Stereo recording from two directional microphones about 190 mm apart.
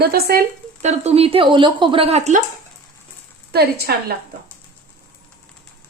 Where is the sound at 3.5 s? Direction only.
60° right (ahead or behind).